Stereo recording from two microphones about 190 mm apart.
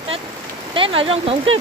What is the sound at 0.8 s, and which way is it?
Speech, 30° right (ahead or behind).